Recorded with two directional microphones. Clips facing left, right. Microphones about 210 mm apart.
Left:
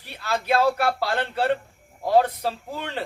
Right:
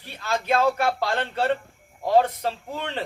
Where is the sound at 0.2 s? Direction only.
5° left (ahead or behind).